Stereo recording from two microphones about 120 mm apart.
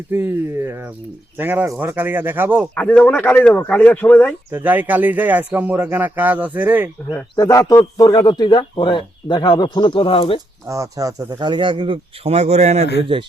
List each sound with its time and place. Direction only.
0.1 s speech: 20° right (ahead or behind)
2.7 s speech: 15° left (ahead or behind)
4.5 s speech: 15° right (ahead or behind)
7.3 s speech: 30° left (ahead or behind); by 10.4 s 50° left (ahead or behind)
10.7 s speech: 30° right (ahead or behind); by 13.2 s 50° right (ahead or behind)